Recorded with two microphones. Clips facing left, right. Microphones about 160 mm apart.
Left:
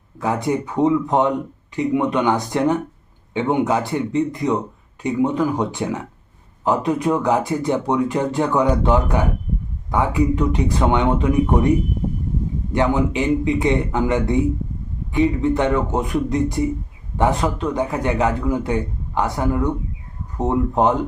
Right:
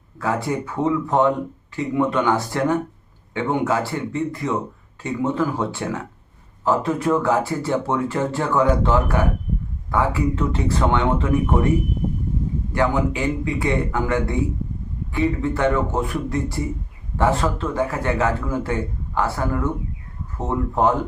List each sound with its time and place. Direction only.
0.2 s speech: 20° left (ahead or behind)
12.7 s speech: 20° left (ahead or behind)